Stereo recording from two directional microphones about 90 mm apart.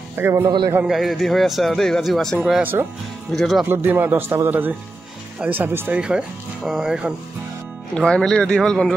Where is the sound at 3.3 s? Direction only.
Centre (ahead or behind).